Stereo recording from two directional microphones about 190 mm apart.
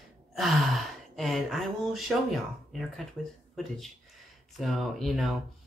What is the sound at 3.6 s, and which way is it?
Speech, centre (ahead or behind).